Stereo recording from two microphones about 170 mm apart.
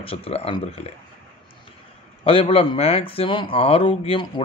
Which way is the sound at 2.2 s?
35° left (ahead or behind).